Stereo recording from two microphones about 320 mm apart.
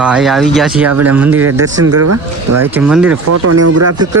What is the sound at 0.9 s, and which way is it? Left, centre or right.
Speech, right.